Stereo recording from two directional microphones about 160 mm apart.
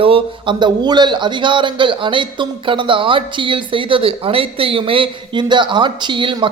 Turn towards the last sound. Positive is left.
turn(degrees=-30)  # may be behind; listen again after turning